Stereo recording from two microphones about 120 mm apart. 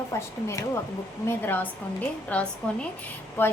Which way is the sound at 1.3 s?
15° left (ahead or behind).